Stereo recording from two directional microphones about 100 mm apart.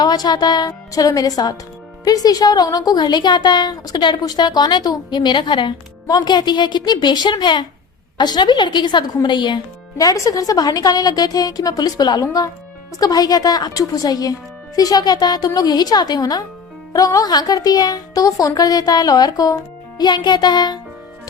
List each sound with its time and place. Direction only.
0.0 s a woman's voice: 40° left (ahead or behind)
10.0 s a woman's voice: 35° left (ahead or behind)